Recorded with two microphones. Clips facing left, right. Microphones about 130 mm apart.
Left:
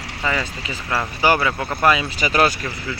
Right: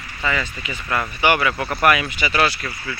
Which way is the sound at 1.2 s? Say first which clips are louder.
Left 1 dB; 35° left (ahead or behind).